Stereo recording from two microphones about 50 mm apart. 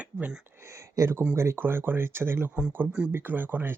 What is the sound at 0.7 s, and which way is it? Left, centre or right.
Speech, right.